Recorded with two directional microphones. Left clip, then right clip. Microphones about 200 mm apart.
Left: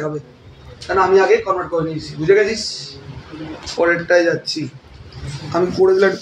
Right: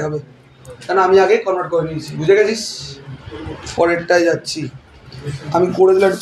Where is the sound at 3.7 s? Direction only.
35° right (ahead or behind).